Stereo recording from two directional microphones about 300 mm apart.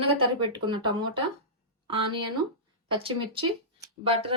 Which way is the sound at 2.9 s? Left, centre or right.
Centre.